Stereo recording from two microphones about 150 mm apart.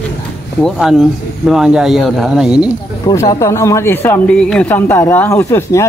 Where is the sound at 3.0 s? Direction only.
25° left (ahead or behind).